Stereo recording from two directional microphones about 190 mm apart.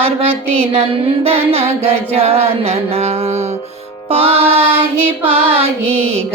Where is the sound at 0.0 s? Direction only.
30° right (ahead or behind).